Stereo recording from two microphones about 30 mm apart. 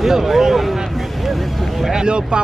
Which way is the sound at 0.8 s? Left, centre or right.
Centre.